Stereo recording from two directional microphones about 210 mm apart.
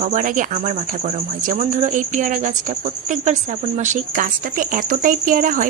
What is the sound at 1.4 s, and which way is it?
Speech, 35° right (ahead or behind).